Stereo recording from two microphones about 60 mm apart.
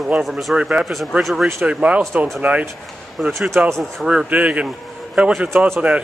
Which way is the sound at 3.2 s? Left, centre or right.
Centre.